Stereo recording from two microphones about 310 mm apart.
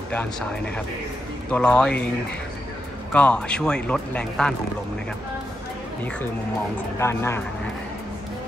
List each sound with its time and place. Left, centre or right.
0.1 s a man's voice: centre
3.1 s a man's voice: centre
7.0 s speech: centre